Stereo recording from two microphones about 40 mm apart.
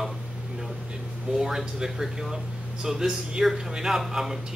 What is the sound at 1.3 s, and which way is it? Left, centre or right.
A man's voice, centre.